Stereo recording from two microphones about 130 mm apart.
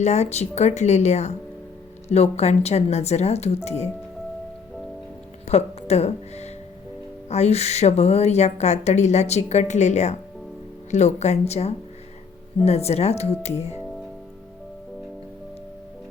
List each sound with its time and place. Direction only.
0.0 s a woman's voice: 60° left (ahead or behind)
5.5 s a woman's voice: 55° left (ahead or behind)